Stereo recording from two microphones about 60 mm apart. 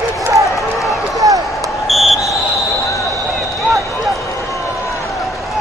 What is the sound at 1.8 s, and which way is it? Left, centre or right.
Basketball bounce, centre.